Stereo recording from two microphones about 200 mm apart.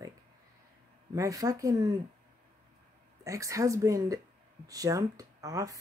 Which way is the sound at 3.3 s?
15° right (ahead or behind).